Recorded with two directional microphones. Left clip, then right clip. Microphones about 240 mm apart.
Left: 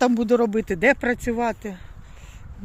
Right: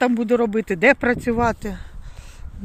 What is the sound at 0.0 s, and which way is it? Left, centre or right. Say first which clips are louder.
Speech: even; centre.